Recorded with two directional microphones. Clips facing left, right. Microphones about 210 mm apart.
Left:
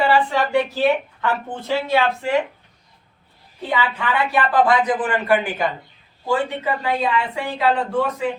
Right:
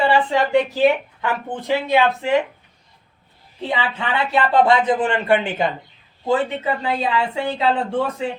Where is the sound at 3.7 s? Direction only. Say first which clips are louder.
Left 1 dB; 25° right (ahead or behind).